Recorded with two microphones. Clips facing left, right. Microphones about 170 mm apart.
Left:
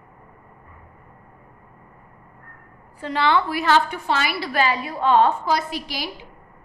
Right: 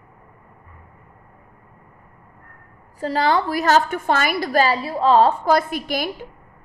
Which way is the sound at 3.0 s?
40° right (ahead or behind).